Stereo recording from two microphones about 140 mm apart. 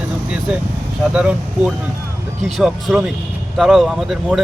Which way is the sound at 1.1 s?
5° right (ahead or behind).